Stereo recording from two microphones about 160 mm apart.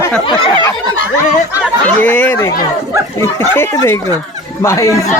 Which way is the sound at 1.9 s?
10° left (ahead or behind).